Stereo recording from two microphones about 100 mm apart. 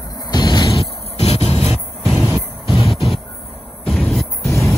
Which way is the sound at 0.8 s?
90° left.